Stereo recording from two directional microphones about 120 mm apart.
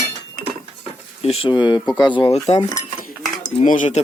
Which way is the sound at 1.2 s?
55° left (ahead or behind).